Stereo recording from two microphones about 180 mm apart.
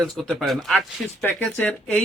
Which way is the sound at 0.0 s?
Centre (ahead or behind).